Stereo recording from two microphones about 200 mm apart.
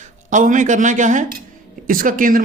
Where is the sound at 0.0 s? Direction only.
40° right (ahead or behind).